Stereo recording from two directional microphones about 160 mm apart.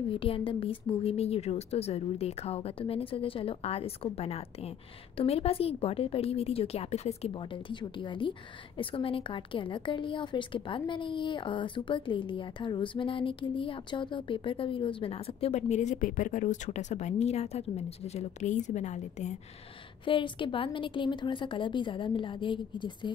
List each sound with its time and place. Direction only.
0.1 s a woman's voice: 35° left (ahead or behind)
20.1 s a woman's voice: 30° left (ahead or behind)